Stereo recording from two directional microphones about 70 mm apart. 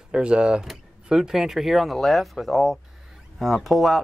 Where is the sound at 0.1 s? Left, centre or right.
Centre.